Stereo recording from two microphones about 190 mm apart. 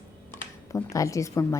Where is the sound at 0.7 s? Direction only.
15° left (ahead or behind).